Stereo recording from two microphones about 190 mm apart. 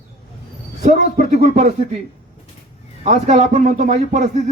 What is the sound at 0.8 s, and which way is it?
A man's voice, 40° right (ahead or behind).